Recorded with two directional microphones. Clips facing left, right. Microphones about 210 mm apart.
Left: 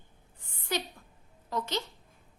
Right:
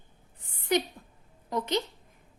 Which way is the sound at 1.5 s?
20° right (ahead or behind).